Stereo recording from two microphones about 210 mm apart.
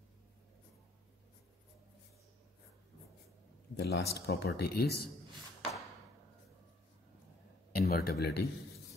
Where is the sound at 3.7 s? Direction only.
50° left (ahead or behind).